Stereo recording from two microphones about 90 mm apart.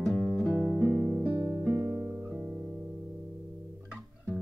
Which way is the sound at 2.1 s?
20° right (ahead or behind).